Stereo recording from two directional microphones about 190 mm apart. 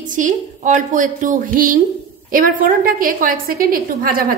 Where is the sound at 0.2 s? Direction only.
40° right (ahead or behind).